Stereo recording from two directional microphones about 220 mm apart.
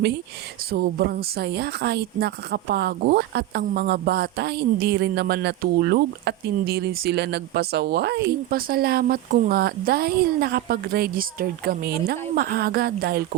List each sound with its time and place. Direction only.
0.7 s speech: 45° right (ahead or behind)